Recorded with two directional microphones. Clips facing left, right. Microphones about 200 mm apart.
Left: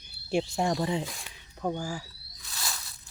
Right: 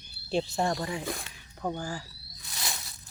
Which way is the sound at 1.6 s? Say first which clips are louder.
Left 2 dB; 10° left (ahead or behind).